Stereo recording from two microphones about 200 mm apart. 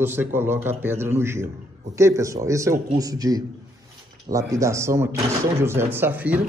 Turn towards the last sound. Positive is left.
turn(degrees=-10)  # may be behind; listen again after turning